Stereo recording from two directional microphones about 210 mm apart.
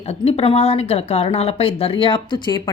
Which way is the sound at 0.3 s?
30° left (ahead or behind).